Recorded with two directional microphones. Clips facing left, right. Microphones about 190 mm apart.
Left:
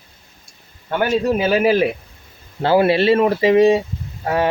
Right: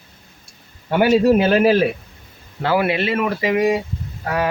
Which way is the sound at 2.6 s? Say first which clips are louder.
Left 4 dB; 30° left (ahead or behind).